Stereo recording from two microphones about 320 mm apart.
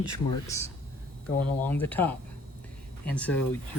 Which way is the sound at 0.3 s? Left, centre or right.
Centre.